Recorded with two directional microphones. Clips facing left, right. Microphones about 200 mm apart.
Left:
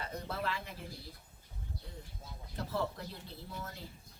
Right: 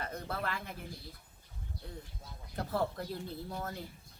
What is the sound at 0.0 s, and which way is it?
Speech, 55° right (ahead or behind).